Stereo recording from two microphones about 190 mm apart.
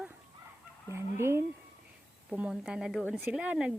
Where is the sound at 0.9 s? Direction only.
15° right (ahead or behind).